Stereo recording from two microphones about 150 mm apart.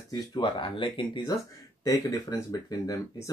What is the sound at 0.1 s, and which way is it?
Speech, 35° left (ahead or behind).